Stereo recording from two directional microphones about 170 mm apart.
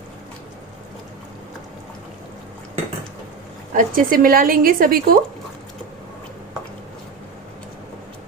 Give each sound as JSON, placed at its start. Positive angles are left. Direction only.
{"t": 3.8, "sound": "a woman's voice", "side_deg": -55}